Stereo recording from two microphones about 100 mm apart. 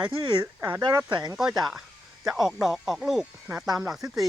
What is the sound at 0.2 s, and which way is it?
Speech, 45° right (ahead or behind).